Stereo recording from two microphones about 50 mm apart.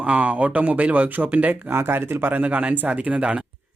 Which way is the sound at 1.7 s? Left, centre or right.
Right.